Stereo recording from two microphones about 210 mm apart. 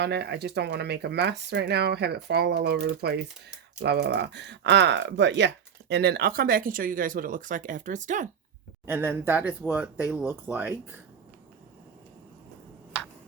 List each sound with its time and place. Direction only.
0.0 s speech: 50° right (ahead or behind); by 8.3 s 35° right (ahead or behind)
8.9 s speech: 10° right (ahead or behind)